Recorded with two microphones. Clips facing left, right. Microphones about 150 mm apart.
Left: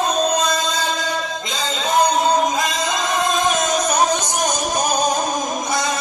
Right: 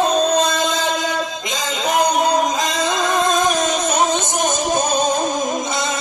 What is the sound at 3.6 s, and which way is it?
Music, 25° right (ahead or behind).